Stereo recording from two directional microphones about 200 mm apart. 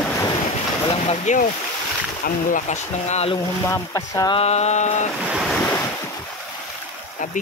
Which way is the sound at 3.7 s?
15° left (ahead or behind).